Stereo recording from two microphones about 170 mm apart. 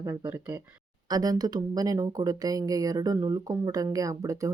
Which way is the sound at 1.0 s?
20° right (ahead or behind).